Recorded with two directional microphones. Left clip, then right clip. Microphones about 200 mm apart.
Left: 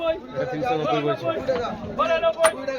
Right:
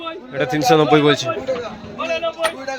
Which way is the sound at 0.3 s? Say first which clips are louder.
Right 9 dB; 30° right (ahead or behind).